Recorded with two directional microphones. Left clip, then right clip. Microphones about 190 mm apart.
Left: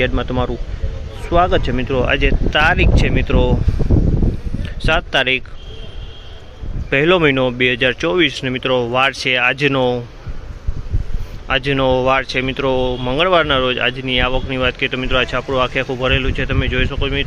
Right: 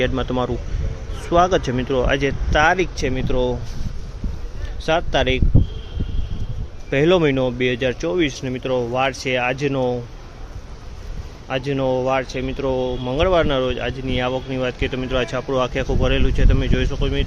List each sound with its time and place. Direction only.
0.0 s speech: centre (ahead or behind)
4.9 s speech: centre (ahead or behind)
6.9 s speech: centre (ahead or behind)
11.4 s speech: 5° left (ahead or behind)